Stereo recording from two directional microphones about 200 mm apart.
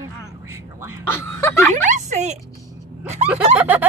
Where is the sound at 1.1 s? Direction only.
10° left (ahead or behind).